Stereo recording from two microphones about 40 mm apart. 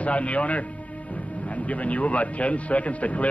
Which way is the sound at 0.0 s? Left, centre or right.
Left.